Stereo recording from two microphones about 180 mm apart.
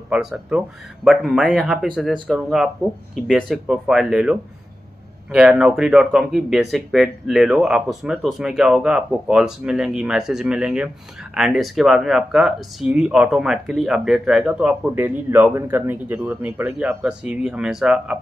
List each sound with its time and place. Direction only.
0.1 s speech: 5° right (ahead or behind)